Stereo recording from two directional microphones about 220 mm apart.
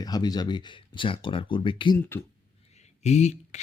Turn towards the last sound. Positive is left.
turn(degrees=30)  # may be behind; listen again after turning